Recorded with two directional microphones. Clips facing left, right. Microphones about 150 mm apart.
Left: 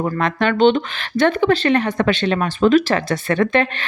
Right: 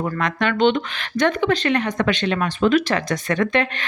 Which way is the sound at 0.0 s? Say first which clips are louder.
Left 3 dB; 30° left (ahead or behind).